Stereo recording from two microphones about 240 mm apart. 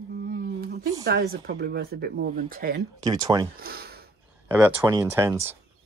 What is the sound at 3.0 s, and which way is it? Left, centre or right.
Speech, centre.